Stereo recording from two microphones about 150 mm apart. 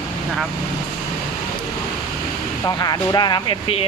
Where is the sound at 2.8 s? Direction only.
25° left (ahead or behind).